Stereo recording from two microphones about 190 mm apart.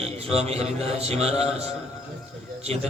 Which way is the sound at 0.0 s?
30° right (ahead or behind).